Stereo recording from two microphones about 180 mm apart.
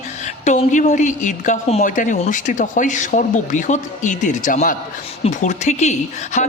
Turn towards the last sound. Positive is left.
turn(degrees=40)  # may be behind; listen again after turning